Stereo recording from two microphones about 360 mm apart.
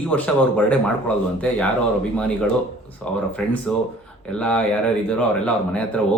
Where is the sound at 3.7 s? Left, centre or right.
Centre.